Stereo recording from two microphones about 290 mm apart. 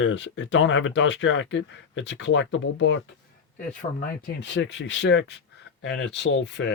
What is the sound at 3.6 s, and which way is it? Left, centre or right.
Speech, left.